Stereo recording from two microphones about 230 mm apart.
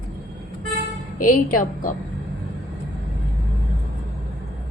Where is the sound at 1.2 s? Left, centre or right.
Left.